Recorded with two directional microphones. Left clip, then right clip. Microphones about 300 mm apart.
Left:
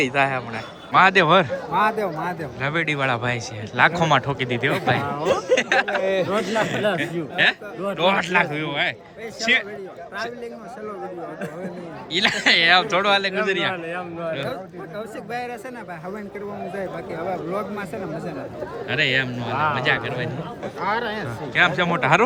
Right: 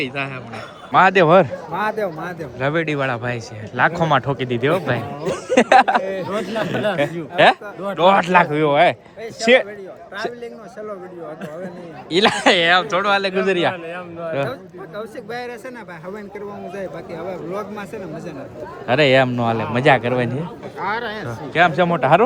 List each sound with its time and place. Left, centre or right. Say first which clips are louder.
0.1 s a man's voice: left 6 dB; centre
6.0 s speech: left 3 dB; left
6.2 s a man's voice: left 1 dB; centre
12.1 s speech: right 3 dB; centre
16.7 s speech: even; centre
18.9 s a man's voice: right 7 dB; centre
20.7 s speech: right 1 dB; centre